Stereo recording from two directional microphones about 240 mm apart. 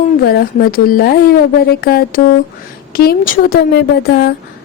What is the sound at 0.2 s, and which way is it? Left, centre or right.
Speech, left.